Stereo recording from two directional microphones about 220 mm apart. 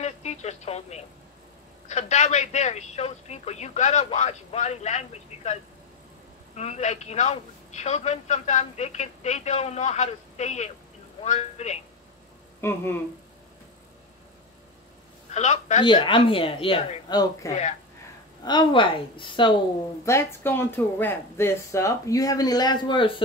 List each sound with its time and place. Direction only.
0.0 s a woman's voice: 30° left (ahead or behind)
12.5 s speech: 10° left (ahead or behind)
15.3 s a woman's voice: 30° left (ahead or behind)
15.8 s speech: 20° left (ahead or behind)
20.1 s speech: 10° left (ahead or behind)